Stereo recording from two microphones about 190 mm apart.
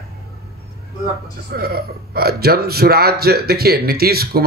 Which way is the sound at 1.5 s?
55° right (ahead or behind).